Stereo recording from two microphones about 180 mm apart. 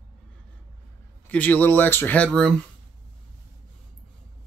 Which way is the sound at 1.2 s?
10° left (ahead or behind).